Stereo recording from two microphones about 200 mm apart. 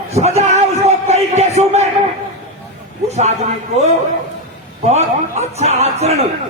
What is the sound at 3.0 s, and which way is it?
A man's voice, 35° right (ahead or behind).